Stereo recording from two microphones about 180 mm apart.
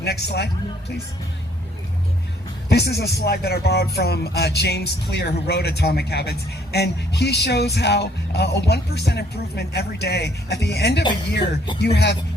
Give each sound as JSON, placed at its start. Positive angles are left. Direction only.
{"t": 0.0, "sound": "speech", "side_deg": 65}
{"t": 2.6, "sound": "speech", "side_deg": 65}